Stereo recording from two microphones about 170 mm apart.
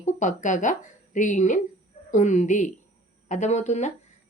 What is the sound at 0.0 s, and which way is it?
Speech, 45° left (ahead or behind).